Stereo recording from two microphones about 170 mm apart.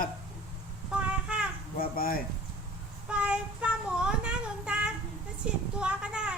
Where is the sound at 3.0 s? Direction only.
5° right (ahead or behind).